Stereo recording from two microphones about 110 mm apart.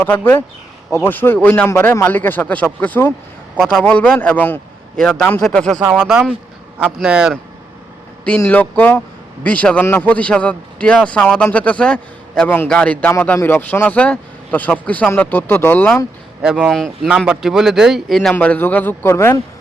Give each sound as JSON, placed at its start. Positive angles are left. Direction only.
{"t": 0.0, "sound": "a man's voice", "side_deg": 15}
{"t": 3.6, "sound": "a man's voice", "side_deg": 5}
{"t": 4.9, "sound": "a man's voice", "side_deg": 5}
{"t": 6.7, "sound": "a man's voice", "side_deg": -15}
{"t": 8.4, "sound": "a man's voice", "side_deg": 15}
{"t": 16.6, "sound": "speech", "side_deg": 5}
{"t": 18.3, "sound": "a man's voice", "side_deg": 15}